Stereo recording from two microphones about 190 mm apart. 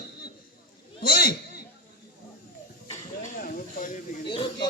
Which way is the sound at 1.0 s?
50° left (ahead or behind).